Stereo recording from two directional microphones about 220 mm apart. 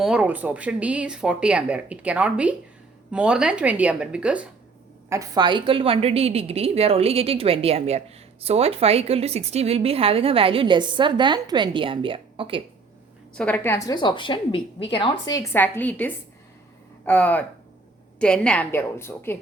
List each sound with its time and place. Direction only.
0.0 s a woman's voice: 5° right (ahead or behind); by 12.6 s 25° right (ahead or behind)
13.3 s a woman's voice: 5° left (ahead or behind); by 15.1 s 25° left (ahead or behind)
15.3 s a woman's voice: 10° left (ahead or behind)